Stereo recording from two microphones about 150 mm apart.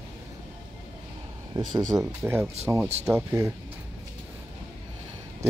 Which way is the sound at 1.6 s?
30° right (ahead or behind).